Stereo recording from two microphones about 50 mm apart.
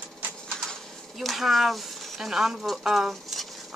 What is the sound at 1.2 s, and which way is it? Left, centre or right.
Speech, centre.